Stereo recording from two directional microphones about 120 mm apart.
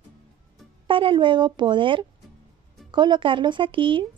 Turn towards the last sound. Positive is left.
turn(degrees=-45)  # may be behind; listen again after turning